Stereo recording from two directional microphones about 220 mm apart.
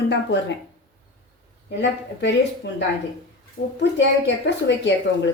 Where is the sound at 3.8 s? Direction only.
50° left (ahead or behind).